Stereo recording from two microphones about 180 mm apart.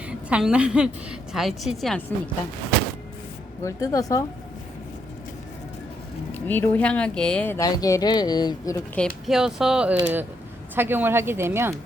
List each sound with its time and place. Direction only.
0.3 s speech: 5° right (ahead or behind)
3.6 s speech: 20° left (ahead or behind)
6.3 s speech: 10° left (ahead or behind)
9.0 s speech: centre (ahead or behind); by 11.7 s 15° right (ahead or behind)